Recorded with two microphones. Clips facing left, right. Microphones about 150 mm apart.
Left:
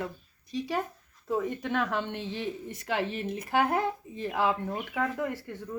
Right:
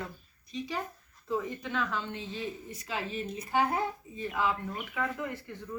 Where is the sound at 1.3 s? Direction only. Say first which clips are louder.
Left 4 dB; 55° left (ahead or behind).